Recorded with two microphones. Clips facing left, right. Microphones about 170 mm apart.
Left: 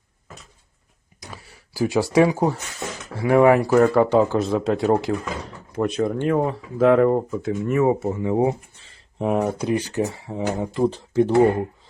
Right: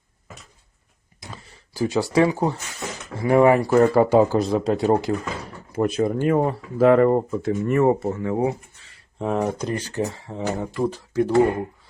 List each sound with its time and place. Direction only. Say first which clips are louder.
1.3 s a sound: right 1 dB; 10° left (ahead or behind)
2.1 s speech: left 2 dB; 15° left (ahead or behind)
3.2 s speech: left 1 dB; centre (ahead or behind)
10.8 s speech: left 4 dB; 25° left (ahead or behind)